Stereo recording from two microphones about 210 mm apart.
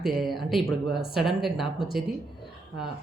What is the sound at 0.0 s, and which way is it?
Speech, centre (ahead or behind).